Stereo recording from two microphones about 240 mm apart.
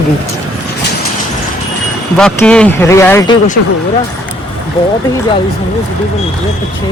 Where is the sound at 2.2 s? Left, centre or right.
Centre.